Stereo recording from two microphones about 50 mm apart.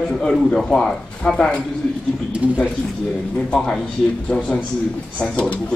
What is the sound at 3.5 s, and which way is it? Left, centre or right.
Speech, centre.